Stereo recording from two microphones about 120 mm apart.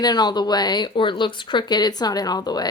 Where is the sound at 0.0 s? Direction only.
35° left (ahead or behind).